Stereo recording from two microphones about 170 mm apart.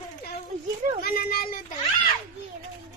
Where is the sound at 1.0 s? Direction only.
60° left (ahead or behind).